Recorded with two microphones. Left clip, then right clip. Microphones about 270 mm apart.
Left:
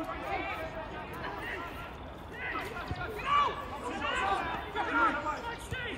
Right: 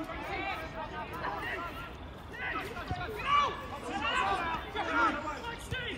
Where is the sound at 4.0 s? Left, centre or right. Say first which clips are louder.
Right 2 dB; centre.